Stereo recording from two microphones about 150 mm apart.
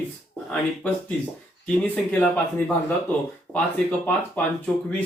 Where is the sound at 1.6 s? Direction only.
5° left (ahead or behind).